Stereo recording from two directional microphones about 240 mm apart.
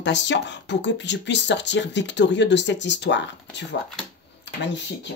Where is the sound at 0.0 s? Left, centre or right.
Left.